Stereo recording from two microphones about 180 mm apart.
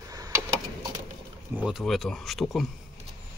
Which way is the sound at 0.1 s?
20° right (ahead or behind).